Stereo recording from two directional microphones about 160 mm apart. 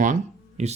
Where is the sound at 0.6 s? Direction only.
40° right (ahead or behind).